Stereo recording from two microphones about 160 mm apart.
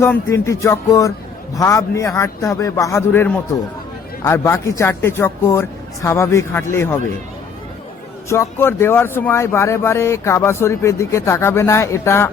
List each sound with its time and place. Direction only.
0.0 s a man's voice: 15° left (ahead or behind)
8.3 s speech: 15° left (ahead or behind)